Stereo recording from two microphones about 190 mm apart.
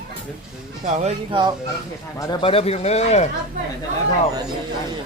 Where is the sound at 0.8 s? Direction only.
40° right (ahead or behind).